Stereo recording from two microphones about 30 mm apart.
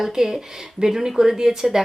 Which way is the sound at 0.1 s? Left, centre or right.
Centre.